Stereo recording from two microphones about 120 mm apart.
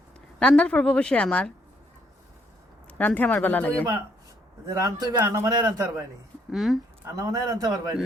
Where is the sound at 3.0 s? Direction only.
15° left (ahead or behind).